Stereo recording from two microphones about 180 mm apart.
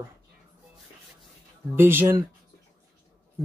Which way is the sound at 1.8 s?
10° right (ahead or behind).